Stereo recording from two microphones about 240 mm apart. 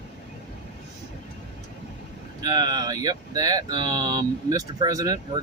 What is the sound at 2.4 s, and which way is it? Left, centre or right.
Speech, centre.